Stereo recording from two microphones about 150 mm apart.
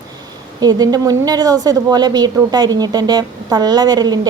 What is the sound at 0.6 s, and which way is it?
A woman's voice, 25° right (ahead or behind).